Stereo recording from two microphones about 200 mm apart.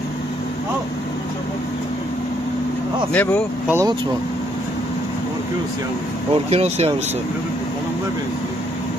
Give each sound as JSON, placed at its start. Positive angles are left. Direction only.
{"t": 3.1, "sound": "speech", "side_deg": 10}
{"t": 3.6, "sound": "speech", "side_deg": -10}
{"t": 6.3, "sound": "speech", "side_deg": -30}